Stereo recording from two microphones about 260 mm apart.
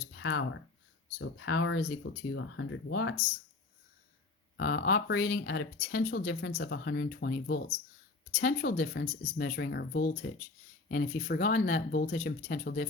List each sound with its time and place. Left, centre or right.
0.2 s speech: left
4.5 s speech: left
8.4 s speech: left